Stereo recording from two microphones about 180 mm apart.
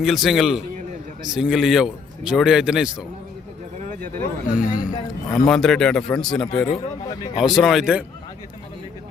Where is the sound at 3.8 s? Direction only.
50° right (ahead or behind).